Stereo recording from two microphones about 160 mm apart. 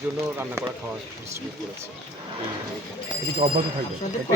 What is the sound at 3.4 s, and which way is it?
Speech, 45° right (ahead or behind).